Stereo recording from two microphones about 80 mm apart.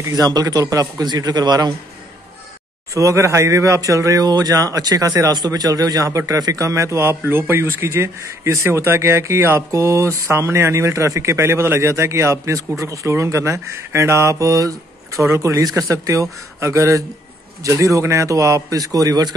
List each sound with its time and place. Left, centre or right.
0.1 s a man's voice: right
2.9 s speech: right